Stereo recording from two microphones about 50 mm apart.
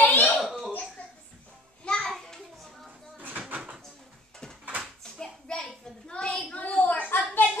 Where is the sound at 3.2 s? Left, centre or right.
Right.